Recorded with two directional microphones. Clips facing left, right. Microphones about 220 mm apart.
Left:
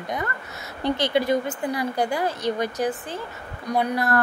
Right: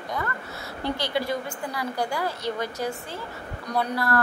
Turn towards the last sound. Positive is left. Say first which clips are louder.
# left 3 dB
turn(degrees=20)  # may be behind; listen again after turning